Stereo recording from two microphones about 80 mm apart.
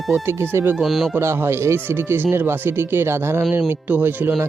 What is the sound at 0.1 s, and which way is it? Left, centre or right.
Speech, right.